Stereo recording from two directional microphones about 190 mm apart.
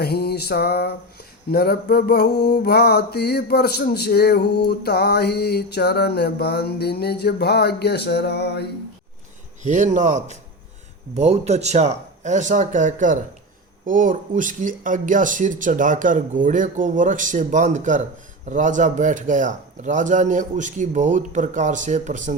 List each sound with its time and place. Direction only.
0.0 s mantra: 55° left (ahead or behind)
9.6 s a man's voice: 40° right (ahead or behind)